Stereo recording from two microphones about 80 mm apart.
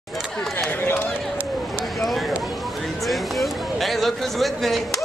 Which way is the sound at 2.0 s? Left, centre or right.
Centre.